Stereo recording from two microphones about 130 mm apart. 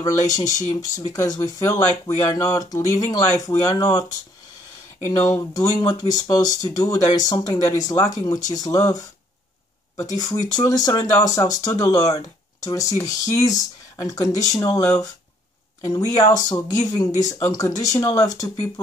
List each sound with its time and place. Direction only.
0.0 s speech: 30° left (ahead or behind)
5.0 s speech: 25° left (ahead or behind)